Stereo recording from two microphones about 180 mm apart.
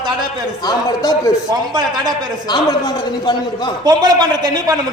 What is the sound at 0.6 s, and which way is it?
Speech, 20° left (ahead or behind).